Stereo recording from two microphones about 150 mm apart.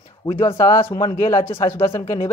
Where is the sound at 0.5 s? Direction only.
20° left (ahead or behind).